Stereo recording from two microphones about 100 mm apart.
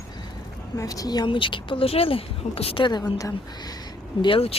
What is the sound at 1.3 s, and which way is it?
Speech, 55° left (ahead or behind).